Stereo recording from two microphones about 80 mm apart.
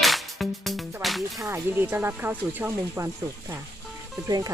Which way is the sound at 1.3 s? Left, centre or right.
Right.